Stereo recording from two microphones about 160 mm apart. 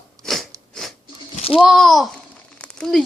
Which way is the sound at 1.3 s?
35° left (ahead or behind).